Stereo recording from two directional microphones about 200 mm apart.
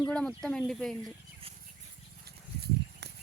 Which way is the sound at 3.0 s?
55° right (ahead or behind).